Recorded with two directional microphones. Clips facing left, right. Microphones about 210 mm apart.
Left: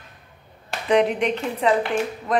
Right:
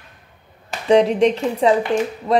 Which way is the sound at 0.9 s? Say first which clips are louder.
Right 5 dB; 35° right (ahead or behind).